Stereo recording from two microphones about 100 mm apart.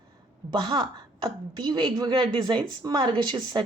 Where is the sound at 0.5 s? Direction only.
55° right (ahead or behind).